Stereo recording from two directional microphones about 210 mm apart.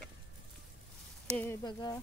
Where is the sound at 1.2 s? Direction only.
5° left (ahead or behind).